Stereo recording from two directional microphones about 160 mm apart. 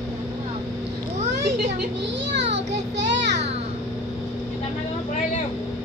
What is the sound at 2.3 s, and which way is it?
Children playing, 90° right.